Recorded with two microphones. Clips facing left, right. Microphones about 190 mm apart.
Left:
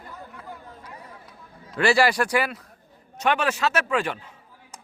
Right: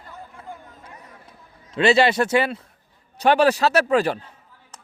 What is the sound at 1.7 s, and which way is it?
A man's voice, 20° right (ahead or behind).